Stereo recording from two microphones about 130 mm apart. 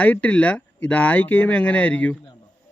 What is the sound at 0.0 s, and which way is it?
Speech, 10° left (ahead or behind).